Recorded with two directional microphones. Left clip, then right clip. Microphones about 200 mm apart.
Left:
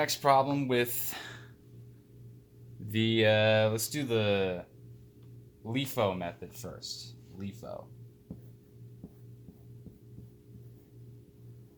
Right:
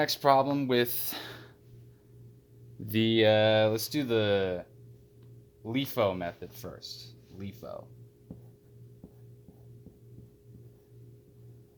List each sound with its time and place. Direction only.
0.0 s speech: 50° right (ahead or behind)
2.8 s speech: 55° right (ahead or behind)
5.6 s speech: 45° right (ahead or behind)